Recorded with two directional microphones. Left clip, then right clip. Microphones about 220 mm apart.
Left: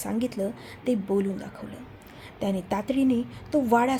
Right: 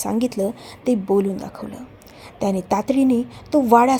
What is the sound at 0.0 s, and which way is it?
A woman's voice, 30° right (ahead or behind).